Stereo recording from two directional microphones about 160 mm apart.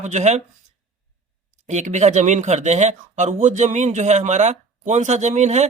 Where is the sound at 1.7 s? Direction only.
45° right (ahead or behind).